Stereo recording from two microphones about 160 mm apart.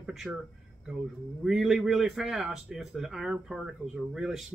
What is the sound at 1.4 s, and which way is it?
Speech, 5° right (ahead or behind).